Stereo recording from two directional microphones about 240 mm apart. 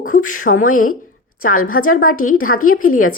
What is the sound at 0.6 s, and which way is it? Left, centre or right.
A woman's voice, left.